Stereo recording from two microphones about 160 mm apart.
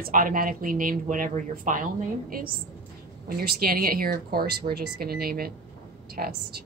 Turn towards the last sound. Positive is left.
turn(degrees=-70)  # may be behind; listen again after turning